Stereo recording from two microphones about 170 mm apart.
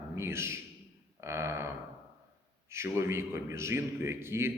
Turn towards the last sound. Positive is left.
turn(degrees=-15)  # may be behind; listen again after turning